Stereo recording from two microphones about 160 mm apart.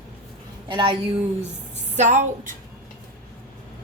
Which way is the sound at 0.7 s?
30° right (ahead or behind).